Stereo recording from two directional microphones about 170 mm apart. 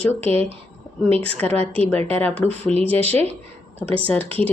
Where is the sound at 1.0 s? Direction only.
35° right (ahead or behind).